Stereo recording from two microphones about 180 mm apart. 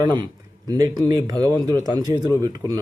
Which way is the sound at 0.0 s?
25° right (ahead or behind).